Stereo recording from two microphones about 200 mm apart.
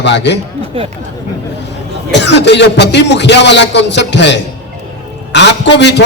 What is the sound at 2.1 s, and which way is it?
A man's voice, 60° left (ahead or behind).